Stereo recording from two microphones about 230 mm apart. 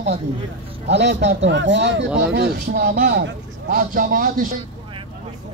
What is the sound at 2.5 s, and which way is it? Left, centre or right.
Speech, right.